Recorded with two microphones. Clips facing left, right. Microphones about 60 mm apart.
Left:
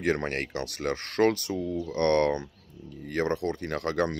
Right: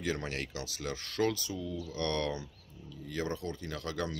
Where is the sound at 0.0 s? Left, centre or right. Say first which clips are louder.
Left 8 dB; left.